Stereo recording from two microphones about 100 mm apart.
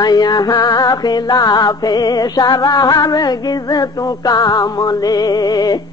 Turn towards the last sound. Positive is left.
turn(degrees=40)  # may be behind; listen again after turning